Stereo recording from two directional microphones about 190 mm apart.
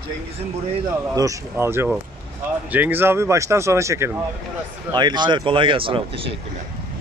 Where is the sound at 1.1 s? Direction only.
15° right (ahead or behind).